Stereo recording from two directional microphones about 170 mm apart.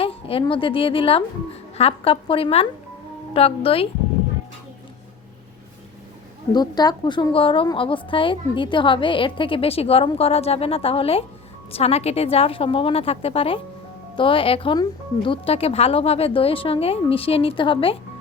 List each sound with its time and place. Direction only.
0.0 s a woman's voice: 35° left (ahead or behind)
6.5 s a woman's voice: 25° left (ahead or behind)